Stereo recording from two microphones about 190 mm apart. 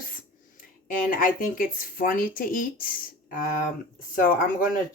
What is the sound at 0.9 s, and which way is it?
Speech, 45° left (ahead or behind).